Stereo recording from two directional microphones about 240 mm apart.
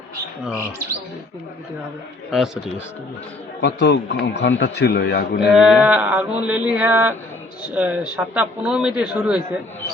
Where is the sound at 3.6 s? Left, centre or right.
Left.